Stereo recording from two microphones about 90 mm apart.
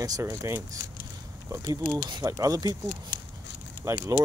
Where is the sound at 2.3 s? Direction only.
40° right (ahead or behind).